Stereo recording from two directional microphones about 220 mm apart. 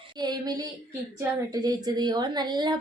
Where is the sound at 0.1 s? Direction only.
20° right (ahead or behind).